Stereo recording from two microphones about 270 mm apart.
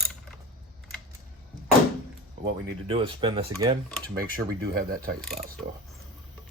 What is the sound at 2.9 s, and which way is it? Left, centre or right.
Speech, centre.